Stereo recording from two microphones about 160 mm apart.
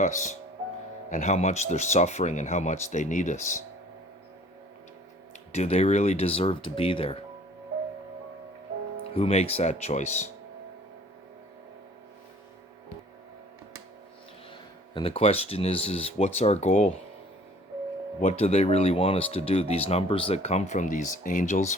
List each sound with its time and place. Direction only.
0.0 s speech: 50° left (ahead or behind)
5.5 s speech: 40° left (ahead or behind)
9.1 s speech: 40° left (ahead or behind)
14.9 s speech: 35° left (ahead or behind)
18.2 s speech: 45° left (ahead or behind)